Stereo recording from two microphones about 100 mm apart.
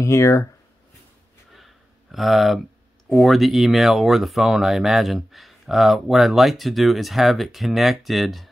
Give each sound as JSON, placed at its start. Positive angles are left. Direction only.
{"t": 0.0, "sound": "speech", "side_deg": 30}
{"t": 2.1, "sound": "speech", "side_deg": 0}